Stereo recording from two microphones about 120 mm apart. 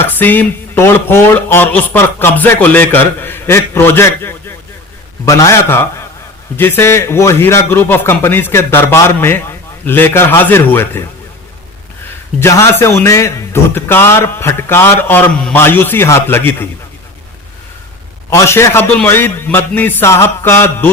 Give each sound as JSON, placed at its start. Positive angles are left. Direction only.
{"t": 0.0, "sound": "a man's voice", "side_deg": 15}
{"t": 12.4, "sound": "a man's voice", "side_deg": 25}
{"t": 18.3, "sound": "a man's voice", "side_deg": 20}